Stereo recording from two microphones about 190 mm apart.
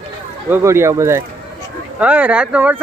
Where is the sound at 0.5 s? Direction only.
15° right (ahead or behind).